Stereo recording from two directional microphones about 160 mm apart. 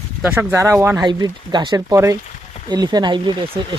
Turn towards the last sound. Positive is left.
turn(degrees=-30)  # may be behind; listen again after turning